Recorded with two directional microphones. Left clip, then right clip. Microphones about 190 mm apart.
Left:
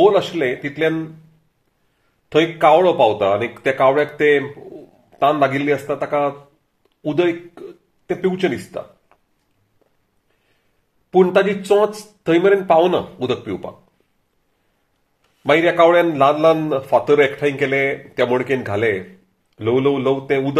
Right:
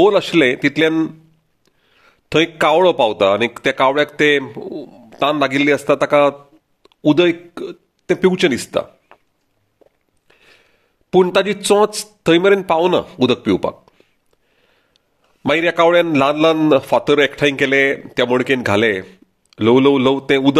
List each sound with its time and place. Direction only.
0.0 s speech: 60° right (ahead or behind)
2.2 s speech: 55° right (ahead or behind)
11.1 s speech: 60° right (ahead or behind)
15.4 s a man's voice: 55° right (ahead or behind)